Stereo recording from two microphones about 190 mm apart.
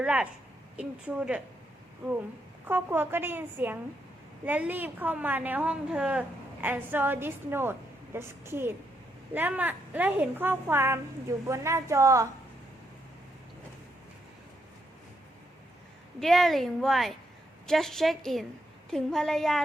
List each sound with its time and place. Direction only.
0.0 s a woman's voice: 5° right (ahead or behind)
2.6 s a woman's voice: 10° right (ahead or behind)
16.2 s a woman's voice: centre (ahead or behind)